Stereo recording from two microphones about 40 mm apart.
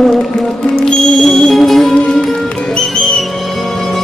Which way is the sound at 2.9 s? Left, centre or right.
Centre.